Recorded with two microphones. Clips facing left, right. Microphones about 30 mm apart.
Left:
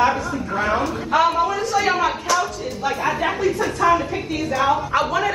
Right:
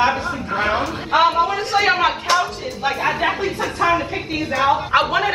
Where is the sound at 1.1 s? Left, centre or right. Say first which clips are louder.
Right 2 dB; right.